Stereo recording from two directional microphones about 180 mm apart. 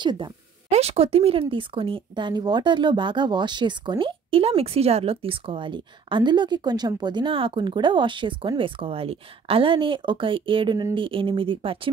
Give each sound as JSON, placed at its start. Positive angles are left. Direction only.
{"t": 0.0, "sound": "speech", "side_deg": -25}
{"t": 0.7, "sound": "speech", "side_deg": -35}